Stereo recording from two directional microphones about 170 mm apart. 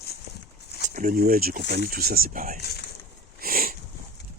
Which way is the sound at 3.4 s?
60° right (ahead or behind).